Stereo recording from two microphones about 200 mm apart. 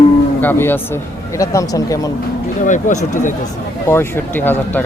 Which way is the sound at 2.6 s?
40° left (ahead or behind).